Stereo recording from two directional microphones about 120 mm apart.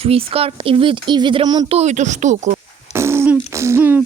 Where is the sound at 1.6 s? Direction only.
65° right (ahead or behind); by 2.6 s 90° right.